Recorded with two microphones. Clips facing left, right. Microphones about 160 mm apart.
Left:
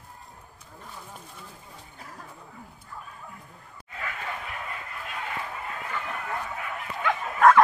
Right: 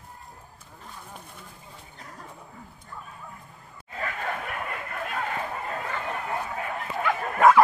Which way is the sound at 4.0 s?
50° right (ahead or behind).